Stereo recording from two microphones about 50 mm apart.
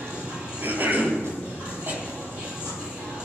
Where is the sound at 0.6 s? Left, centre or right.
Right.